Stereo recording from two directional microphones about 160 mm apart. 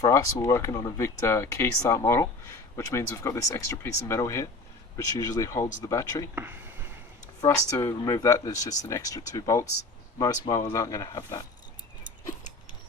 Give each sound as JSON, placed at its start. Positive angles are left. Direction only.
{"t": 0.0, "sound": "speech", "side_deg": 20}
{"t": 6.3, "sound": "a sound", "side_deg": -10}
{"t": 7.4, "sound": "speech", "side_deg": 15}